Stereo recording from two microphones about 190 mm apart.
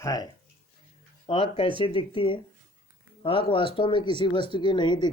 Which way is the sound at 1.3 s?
30° left (ahead or behind).